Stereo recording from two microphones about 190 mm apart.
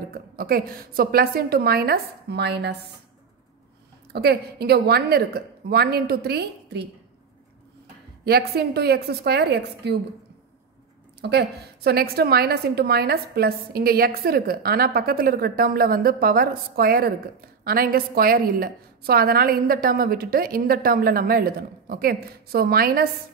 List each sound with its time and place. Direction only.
0.1 s a woman's voice: 50° right (ahead or behind)
4.1 s a woman's voice: 55° right (ahead or behind)
8.3 s a woman's voice: 55° right (ahead or behind)
11.1 s a woman's voice: 60° right (ahead or behind)